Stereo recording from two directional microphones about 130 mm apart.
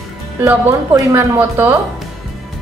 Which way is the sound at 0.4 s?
20° right (ahead or behind).